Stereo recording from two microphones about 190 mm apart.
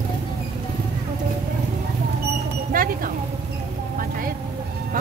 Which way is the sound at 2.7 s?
50° right (ahead or behind).